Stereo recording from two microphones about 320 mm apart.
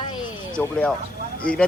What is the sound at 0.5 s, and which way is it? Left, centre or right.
Speech, centre.